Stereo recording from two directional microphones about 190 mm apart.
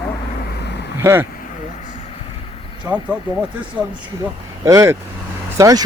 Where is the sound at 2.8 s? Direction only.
5° right (ahead or behind).